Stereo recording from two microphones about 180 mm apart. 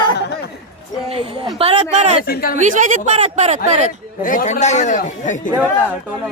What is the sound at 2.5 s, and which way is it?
Speech, 45° right (ahead or behind).